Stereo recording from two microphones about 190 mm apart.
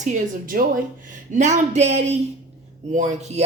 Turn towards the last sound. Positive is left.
turn(degrees=-35)  # may be behind; listen again after turning